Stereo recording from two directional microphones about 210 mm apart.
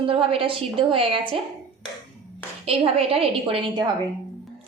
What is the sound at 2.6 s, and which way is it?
A woman's voice, 25° right (ahead or behind).